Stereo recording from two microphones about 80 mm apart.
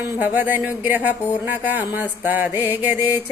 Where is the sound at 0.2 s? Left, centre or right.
Right.